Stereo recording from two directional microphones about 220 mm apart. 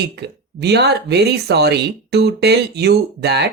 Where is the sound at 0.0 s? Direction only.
50° right (ahead or behind).